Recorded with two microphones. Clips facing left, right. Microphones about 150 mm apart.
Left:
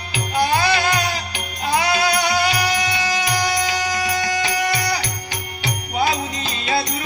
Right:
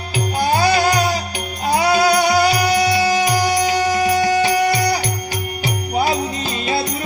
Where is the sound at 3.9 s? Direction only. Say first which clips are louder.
Right 7 dB; 25° right (ahead or behind).